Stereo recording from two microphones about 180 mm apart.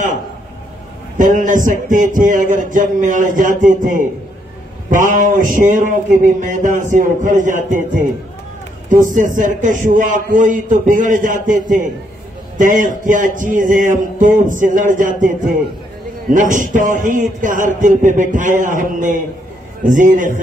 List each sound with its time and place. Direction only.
1.1 s a man's voice: 45° right (ahead or behind)